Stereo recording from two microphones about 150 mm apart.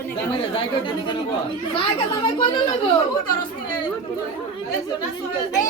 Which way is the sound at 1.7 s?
35° left (ahead or behind).